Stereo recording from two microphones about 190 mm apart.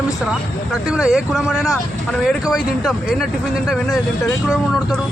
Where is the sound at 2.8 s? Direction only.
Centre (ahead or behind).